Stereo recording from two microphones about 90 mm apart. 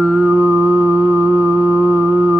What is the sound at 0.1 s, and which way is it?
Music, 15° right (ahead or behind).